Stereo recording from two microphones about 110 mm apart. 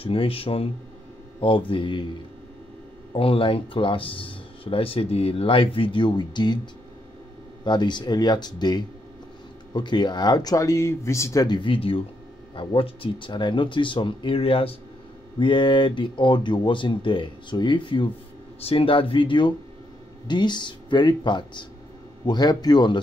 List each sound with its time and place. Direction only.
0.0 s speech: 55° left (ahead or behind)
1.7 s speech: 50° left (ahead or behind)
3.2 s speech: 55° left (ahead or behind); by 11.4 s 25° left (ahead or behind)
11.4 s speech: 45° left (ahead or behind)
15.3 s speech: 50° left (ahead or behind)
18.6 s speech: 60° left (ahead or behind); by 22.9 s 40° left (ahead or behind)